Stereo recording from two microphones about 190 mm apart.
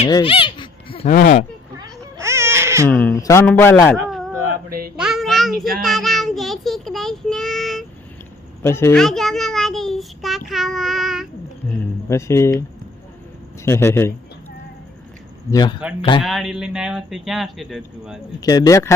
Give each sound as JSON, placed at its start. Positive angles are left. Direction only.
{"t": 0.1, "sound": "a sound", "side_deg": 25}
{"t": 1.1, "sound": "speech", "side_deg": 50}
{"t": 1.8, "sound": "baby cry", "side_deg": -15}
{"t": 2.9, "sound": "a man's voice", "side_deg": 0}
{"t": 3.2, "sound": "a man's voice", "side_deg": 15}
{"t": 3.9, "sound": "a sound", "side_deg": 0}
{"t": 5.8, "sound": "child singing", "side_deg": 0}
{"t": 8.6, "sound": "a man's voice", "side_deg": 15}
{"t": 9.0, "sound": "child singing", "side_deg": 0}
{"t": 12.0, "sound": "a man's voice", "side_deg": 15}
{"t": 13.7, "sound": "a man's voice", "side_deg": 15}
{"t": 15.4, "sound": "speech", "side_deg": 20}
{"t": 16.2, "sound": "a man's voice", "side_deg": 0}
{"t": 18.3, "sound": "speech", "side_deg": 20}